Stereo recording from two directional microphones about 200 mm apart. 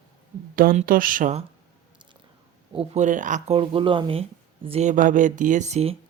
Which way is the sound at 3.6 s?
25° right (ahead or behind).